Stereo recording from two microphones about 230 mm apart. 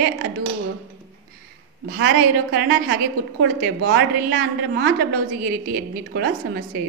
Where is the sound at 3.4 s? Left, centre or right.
Right.